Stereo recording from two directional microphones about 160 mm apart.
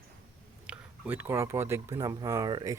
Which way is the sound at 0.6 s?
10° right (ahead or behind).